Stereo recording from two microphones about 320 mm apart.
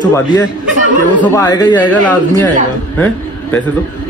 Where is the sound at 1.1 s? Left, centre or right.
Centre.